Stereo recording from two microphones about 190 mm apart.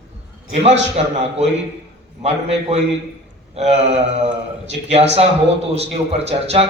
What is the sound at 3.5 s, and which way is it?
A man's voice, 35° right (ahead or behind).